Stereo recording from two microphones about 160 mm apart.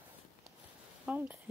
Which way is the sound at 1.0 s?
10° right (ahead or behind).